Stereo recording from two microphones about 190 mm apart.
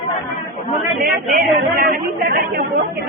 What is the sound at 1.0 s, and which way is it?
Speech, 50° right (ahead or behind).